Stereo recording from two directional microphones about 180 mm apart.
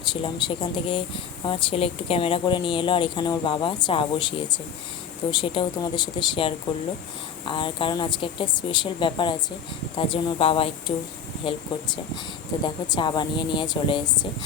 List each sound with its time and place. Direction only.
0.0 s a woman's voice: 25° left (ahead or behind)
12.6 s a woman's voice: 25° left (ahead or behind)